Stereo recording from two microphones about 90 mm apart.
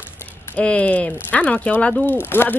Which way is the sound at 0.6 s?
15° left (ahead or behind).